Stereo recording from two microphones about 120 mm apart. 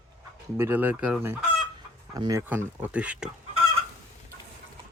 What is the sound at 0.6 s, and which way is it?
Speech, 15° right (ahead or behind).